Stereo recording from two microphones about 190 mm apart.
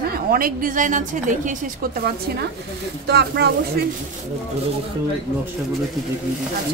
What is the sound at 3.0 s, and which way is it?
Speech, 60° right (ahead or behind).